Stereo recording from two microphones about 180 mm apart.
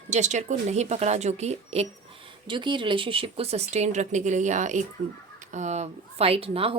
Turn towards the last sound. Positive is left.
turn(degrees=-30)  # may be behind; listen again after turning